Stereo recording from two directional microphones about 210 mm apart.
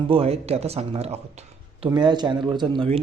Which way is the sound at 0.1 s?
30° right (ahead or behind).